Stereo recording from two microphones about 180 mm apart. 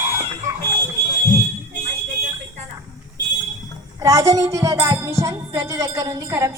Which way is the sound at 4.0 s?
20° right (ahead or behind).